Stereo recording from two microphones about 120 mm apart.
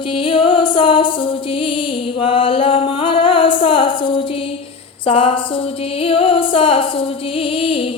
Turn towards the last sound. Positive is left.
turn(degrees=50)  # may be behind; listen again after turning